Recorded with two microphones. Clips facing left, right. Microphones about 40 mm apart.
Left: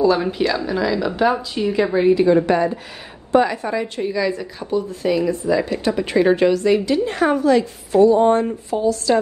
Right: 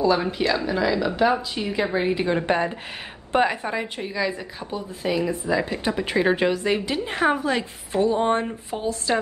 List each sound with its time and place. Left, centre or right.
0.0 s a woman's voice: centre
2.1 s a woman's voice: right
3.6 s a woman's voice: centre